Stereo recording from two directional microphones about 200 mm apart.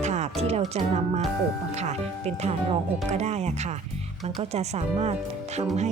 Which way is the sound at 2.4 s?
35° right (ahead or behind).